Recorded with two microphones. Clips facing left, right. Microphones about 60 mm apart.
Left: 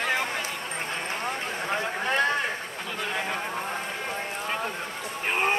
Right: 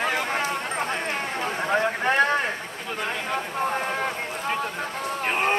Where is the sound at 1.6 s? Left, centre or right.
Right.